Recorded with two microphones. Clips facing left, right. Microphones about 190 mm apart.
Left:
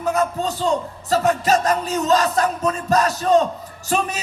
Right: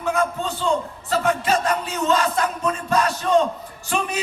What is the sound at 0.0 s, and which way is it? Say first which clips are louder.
Music: left 2 dB; 40° left (ahead or behind).